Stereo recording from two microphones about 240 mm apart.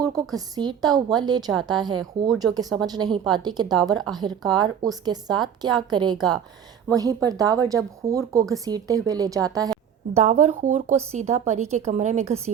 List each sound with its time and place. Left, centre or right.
0.0 s speech: centre
10.2 s a woman's voice: right